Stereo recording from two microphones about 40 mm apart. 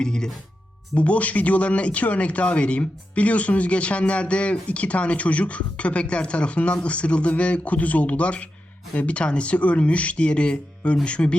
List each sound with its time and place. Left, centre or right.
0.0 s speech: centre
0.9 s speech: left